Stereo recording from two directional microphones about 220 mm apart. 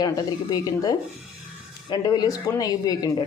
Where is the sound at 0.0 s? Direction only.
15° left (ahead or behind).